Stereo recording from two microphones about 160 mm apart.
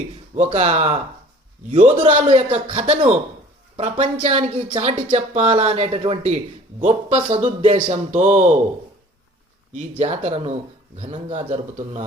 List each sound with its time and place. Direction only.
0.3 s speech: 45° right (ahead or behind)
2.0 s a woman's voice: 35° right (ahead or behind)
10.0 s a woman's voice: 45° right (ahead or behind)